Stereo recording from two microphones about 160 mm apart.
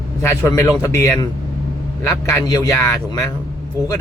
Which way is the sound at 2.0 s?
15° left (ahead or behind).